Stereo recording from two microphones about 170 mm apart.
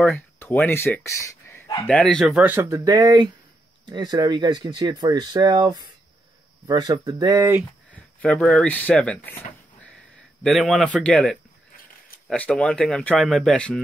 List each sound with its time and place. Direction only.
0.0 s speech: 10° left (ahead or behind)
1.9 s speech: 5° left (ahead or behind); by 7.5 s 20° right (ahead or behind)
7.9 s a man's voice: 5° left (ahead or behind)